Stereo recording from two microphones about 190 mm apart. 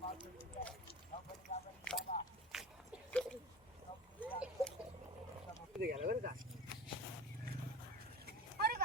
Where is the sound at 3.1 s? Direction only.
5° left (ahead or behind).